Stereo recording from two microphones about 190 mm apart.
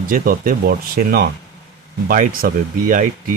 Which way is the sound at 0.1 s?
50° right (ahead or behind).